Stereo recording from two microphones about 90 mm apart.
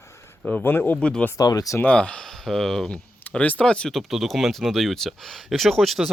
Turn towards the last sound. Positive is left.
turn(degrees=0)  # may be behind; listen again after turning